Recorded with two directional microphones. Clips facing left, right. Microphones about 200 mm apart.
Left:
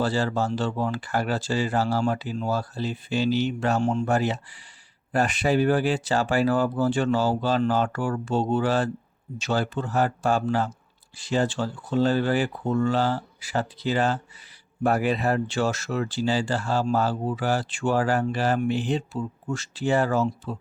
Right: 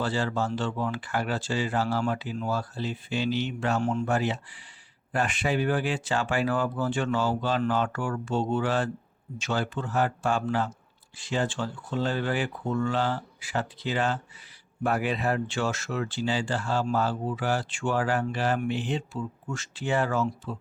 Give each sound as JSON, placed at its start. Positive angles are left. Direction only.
{"t": 0.0, "sound": "speech", "side_deg": 40}